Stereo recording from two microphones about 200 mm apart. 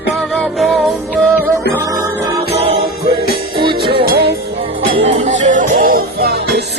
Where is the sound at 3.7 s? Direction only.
50° right (ahead or behind).